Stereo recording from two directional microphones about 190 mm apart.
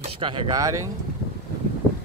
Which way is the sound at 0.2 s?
25° right (ahead or behind).